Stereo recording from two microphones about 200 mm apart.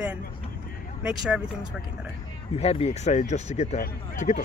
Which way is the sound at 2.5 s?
30° left (ahead or behind).